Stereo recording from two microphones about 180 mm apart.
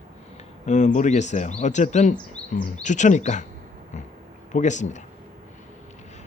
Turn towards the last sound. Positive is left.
turn(degrees=40)  # may be behind; listen again after turning